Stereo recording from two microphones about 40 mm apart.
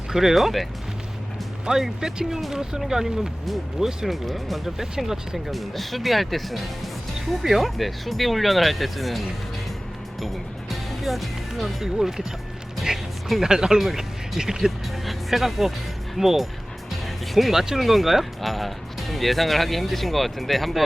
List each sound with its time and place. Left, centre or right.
0.1 s speech: centre
1.6 s speech: centre
3.4 s speech: centre
5.5 s speech: centre
12.9 s music: centre
13.2 s speech: centre
13.5 s speech: centre
15.0 s speech: centre